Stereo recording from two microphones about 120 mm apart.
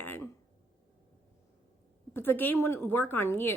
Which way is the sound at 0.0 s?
15° left (ahead or behind).